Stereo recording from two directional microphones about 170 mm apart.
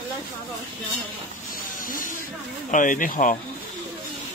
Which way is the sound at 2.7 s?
50° left (ahead or behind).